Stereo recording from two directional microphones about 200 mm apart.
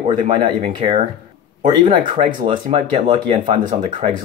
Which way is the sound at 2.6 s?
30° right (ahead or behind).